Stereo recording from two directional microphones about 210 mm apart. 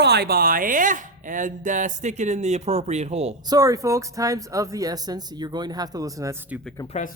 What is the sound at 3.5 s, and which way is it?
Speech, 15° right (ahead or behind).